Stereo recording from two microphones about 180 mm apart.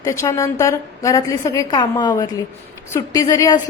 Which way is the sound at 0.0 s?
20° left (ahead or behind).